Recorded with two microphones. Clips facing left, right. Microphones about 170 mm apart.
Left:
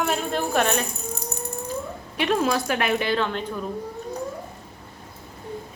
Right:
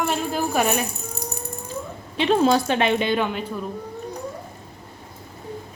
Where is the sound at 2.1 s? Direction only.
25° right (ahead or behind); by 3.6 s 10° right (ahead or behind).